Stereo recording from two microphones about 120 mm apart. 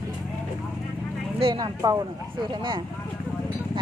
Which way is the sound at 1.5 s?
30° right (ahead or behind).